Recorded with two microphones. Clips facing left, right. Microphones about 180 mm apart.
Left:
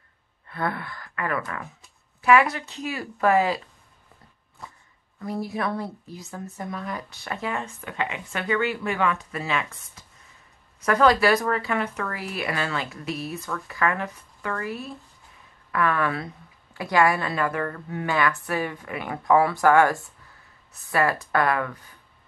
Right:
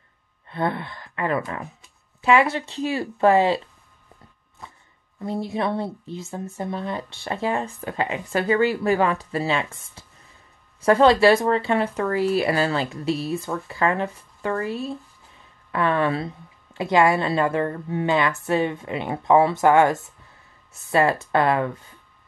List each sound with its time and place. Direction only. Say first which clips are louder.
0.5 s speech: right 4 dB; 25° right (ahead or behind)
5.2 s speech: right 3 dB; 25° right (ahead or behind)